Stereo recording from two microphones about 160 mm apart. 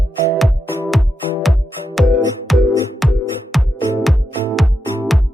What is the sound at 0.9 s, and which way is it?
Music, centre (ahead or behind).